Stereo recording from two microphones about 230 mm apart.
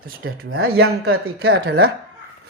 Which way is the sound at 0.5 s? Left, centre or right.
Right.